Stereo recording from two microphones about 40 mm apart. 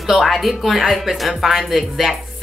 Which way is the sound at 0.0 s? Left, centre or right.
Centre.